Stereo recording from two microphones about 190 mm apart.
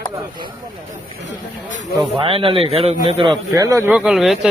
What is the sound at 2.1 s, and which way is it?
Speech, 30° right (ahead or behind).